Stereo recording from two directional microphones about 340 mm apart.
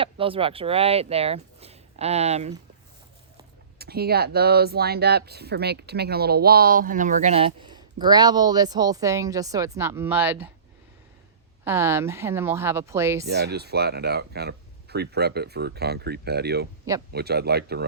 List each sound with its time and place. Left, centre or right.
0.0 s speech: centre
3.8 s speech: right; by 10.5 s centre
11.6 s speech: centre
13.2 s speech: right